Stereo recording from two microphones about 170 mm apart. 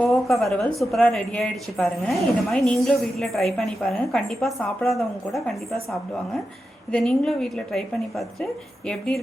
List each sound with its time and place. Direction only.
0.0 s a woman's voice: 5° left (ahead or behind)